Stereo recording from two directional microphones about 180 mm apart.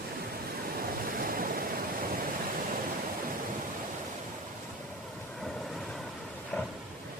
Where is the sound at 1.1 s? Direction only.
50° right (ahead or behind).